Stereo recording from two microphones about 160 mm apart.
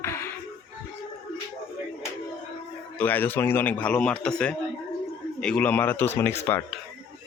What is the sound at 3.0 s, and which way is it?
A man's voice, 10° left (ahead or behind).